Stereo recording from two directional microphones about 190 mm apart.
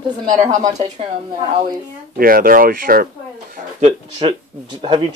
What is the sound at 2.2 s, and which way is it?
Speech, 50° right (ahead or behind).